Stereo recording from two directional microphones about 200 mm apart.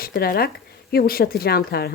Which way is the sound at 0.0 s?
45° left (ahead or behind).